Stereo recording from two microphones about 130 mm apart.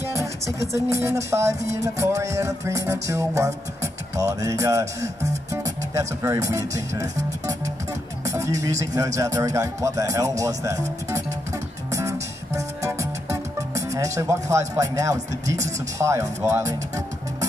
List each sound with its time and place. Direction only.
0.0 s music: 20° right (ahead or behind)
5.5 s speech: 25° right (ahead or behind)
8.3 s music: 25° right (ahead or behind)